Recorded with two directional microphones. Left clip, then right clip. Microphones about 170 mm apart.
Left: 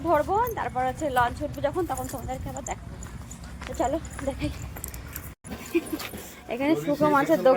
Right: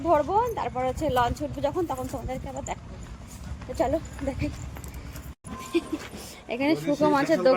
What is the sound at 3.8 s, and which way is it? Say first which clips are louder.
Speech: right 1 dB; 15° right (ahead or behind).